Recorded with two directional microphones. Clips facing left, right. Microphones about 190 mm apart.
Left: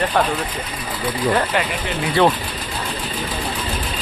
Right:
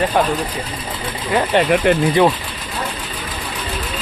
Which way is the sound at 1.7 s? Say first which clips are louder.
Right 12 dB; 60° right (ahead or behind).